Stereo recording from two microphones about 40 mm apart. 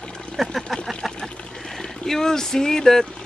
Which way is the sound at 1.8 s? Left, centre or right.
Centre.